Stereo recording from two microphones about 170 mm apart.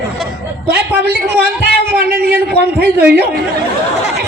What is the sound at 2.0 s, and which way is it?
Speech, 65° right (ahead or behind).